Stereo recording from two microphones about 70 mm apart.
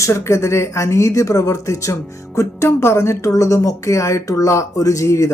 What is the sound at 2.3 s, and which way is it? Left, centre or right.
A man's voice, left.